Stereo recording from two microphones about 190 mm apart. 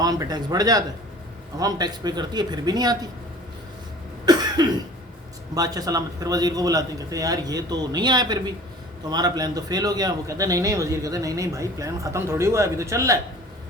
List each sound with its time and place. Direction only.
0.0 s a man's voice: 20° right (ahead or behind)
4.3 s cough: 20° right (ahead or behind)
5.5 s a man's voice: 20° right (ahead or behind)